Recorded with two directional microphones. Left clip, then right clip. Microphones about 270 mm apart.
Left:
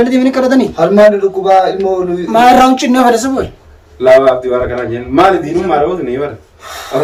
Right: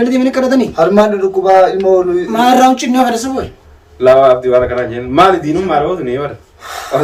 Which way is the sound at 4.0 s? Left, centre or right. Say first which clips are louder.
Even; centre.